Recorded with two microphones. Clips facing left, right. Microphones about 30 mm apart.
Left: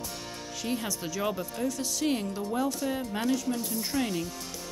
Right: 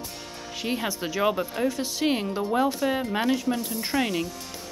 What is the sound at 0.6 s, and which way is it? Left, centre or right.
A woman's voice, right.